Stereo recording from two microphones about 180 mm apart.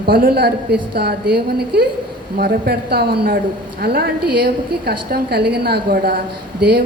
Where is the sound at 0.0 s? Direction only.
55° right (ahead or behind).